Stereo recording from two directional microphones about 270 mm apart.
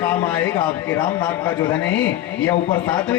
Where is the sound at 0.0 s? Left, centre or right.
Centre.